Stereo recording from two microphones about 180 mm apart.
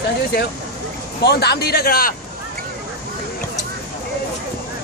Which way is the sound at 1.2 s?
65° left (ahead or behind).